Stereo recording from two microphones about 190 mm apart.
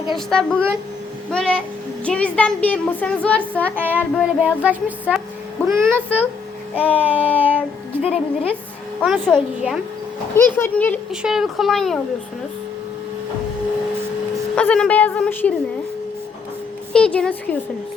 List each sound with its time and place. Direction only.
0.1 s a woman's voice: 5° left (ahead or behind)
3.8 s child singing: 10° right (ahead or behind)
5.8 s speech: 10° left (ahead or behind)
8.0 s speech: 30° left (ahead or behind)
9.0 s a woman's voice: 5° left (ahead or behind)
10.3 s speech: 10° left (ahead or behind)
11.1 s a woman's voice: 5° right (ahead or behind)
14.5 s speech: 5° left (ahead or behind)
16.9 s a woman's voice: 5° left (ahead or behind)